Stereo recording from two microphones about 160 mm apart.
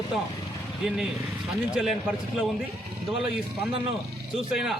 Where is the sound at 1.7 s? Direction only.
5° right (ahead or behind).